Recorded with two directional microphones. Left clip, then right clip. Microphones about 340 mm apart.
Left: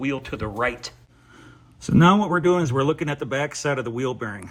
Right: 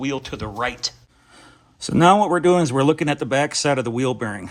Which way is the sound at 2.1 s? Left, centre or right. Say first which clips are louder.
Right 4 dB; right.